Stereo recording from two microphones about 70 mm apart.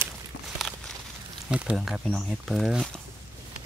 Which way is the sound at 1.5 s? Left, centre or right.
Centre.